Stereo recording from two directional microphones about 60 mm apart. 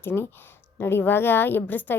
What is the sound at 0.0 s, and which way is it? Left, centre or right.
A woman's voice, left.